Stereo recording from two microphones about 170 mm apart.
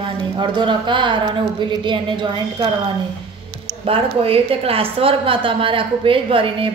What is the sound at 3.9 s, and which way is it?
Speech, 35° right (ahead or behind).